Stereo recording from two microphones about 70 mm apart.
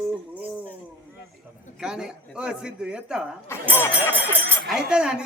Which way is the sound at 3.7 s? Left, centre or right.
Left.